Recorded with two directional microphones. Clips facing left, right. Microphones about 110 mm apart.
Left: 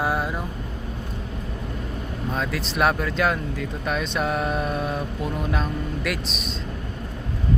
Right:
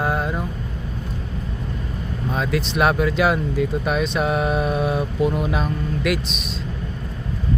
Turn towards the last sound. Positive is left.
turn(degrees=0)  # may be behind; listen again after turning